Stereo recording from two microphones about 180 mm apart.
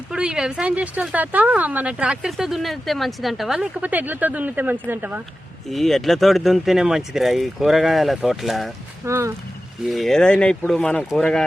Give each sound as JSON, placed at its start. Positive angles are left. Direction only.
{"t": 0.1, "sound": "speech", "side_deg": -5}
{"t": 5.7, "sound": "speech", "side_deg": 0}
{"t": 9.0, "sound": "speech", "side_deg": -15}
{"t": 9.8, "sound": "speech", "side_deg": 0}